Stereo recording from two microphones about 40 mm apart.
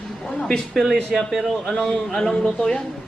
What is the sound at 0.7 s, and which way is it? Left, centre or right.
Speech, centre.